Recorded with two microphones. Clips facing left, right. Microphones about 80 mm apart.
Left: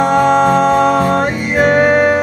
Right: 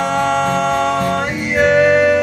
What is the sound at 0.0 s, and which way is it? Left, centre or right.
Music, left.